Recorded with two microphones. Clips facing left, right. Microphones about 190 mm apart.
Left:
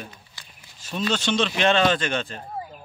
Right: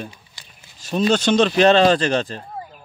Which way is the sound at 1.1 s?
40° right (ahead or behind).